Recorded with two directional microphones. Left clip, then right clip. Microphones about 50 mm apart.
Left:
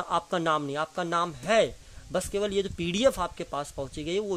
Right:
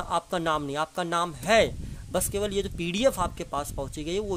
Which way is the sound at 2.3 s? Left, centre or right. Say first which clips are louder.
Left 1 dB; centre.